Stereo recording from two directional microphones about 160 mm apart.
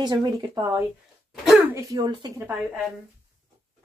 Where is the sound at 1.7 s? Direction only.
25° right (ahead or behind).